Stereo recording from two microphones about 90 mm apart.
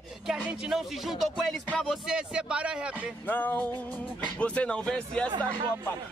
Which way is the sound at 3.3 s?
20° left (ahead or behind).